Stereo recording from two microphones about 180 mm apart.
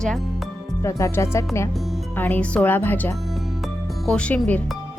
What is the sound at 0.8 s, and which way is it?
Speech, 15° left (ahead or behind).